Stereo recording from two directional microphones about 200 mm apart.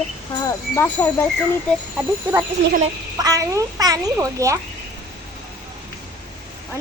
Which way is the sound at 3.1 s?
20° right (ahead or behind).